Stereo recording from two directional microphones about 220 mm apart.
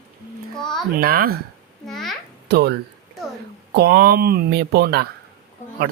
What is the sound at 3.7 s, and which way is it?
Speech, 45° right (ahead or behind).